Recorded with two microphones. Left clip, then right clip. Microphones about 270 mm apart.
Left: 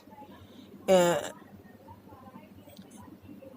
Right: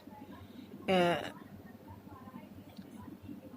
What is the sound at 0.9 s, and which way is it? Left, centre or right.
Speech, left.